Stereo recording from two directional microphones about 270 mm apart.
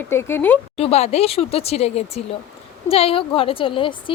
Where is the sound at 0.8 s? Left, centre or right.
Left.